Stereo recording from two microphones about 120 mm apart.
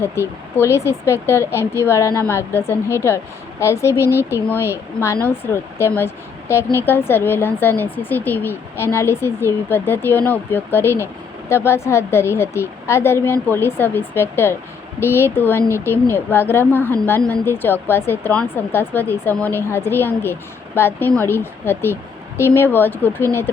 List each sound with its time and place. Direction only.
0.0 s a woman's voice: 20° left (ahead or behind)